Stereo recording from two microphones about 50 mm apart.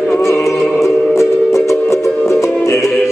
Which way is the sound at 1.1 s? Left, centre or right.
Left.